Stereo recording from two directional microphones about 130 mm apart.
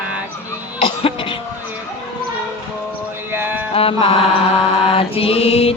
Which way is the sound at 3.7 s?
45° left (ahead or behind).